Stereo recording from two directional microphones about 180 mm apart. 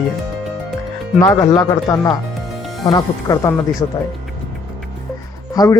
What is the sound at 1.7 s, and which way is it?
Speech, 20° left (ahead or behind).